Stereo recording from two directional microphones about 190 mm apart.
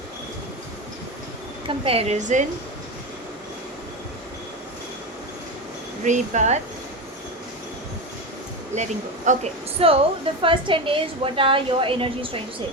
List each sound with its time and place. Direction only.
1.6 s a woman's voice: 30° right (ahead or behind)
6.0 s a woman's voice: 40° right (ahead or behind)
8.7 s a woman's voice: 40° right (ahead or behind)